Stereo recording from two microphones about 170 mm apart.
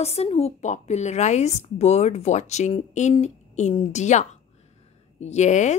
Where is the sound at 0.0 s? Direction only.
35° left (ahead or behind).